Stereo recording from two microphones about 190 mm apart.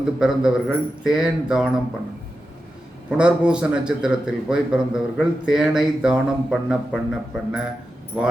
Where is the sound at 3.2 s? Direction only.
5° right (ahead or behind).